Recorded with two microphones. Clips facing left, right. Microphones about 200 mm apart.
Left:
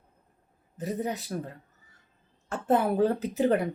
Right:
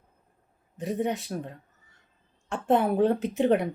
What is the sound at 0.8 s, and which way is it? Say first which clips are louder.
Speech: right 3 dB; centre (ahead or behind).